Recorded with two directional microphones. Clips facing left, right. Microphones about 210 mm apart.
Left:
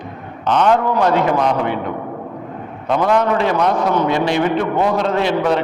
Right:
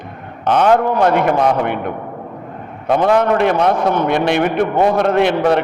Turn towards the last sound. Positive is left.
turn(degrees=-55)  # may be behind; listen again after turning